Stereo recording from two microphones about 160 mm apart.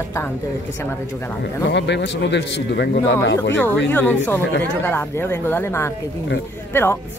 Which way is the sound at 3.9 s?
10° left (ahead or behind).